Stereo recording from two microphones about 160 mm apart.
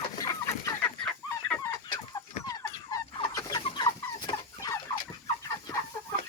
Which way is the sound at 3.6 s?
30° left (ahead or behind).